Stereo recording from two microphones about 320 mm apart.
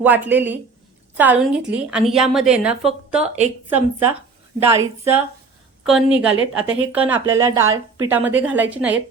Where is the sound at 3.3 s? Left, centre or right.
Right.